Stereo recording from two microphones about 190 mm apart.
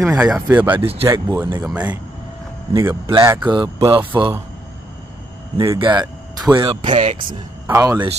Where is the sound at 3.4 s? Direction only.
25° right (ahead or behind).